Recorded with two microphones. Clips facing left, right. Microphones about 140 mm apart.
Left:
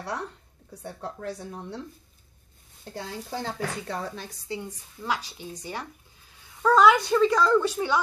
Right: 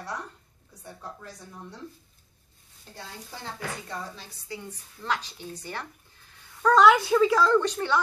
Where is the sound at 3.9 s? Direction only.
65° left (ahead or behind).